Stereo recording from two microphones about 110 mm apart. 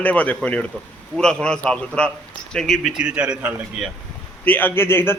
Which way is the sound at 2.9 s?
10° right (ahead or behind).